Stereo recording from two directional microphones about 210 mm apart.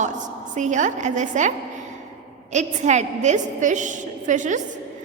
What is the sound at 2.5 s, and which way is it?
A woman's voice, 35° right (ahead or behind).